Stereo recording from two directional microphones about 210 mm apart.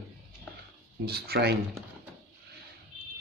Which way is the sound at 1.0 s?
50° right (ahead or behind).